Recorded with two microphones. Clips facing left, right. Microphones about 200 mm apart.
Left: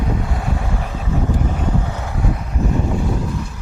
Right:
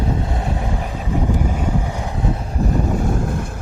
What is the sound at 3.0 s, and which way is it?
Vehicle, 50° right (ahead or behind).